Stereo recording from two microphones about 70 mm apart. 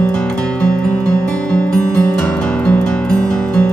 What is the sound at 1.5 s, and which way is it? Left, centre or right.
Music, centre.